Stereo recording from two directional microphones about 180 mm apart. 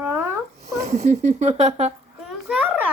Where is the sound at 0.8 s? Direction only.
35° right (ahead or behind).